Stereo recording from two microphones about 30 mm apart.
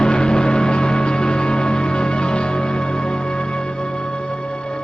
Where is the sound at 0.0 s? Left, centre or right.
Left.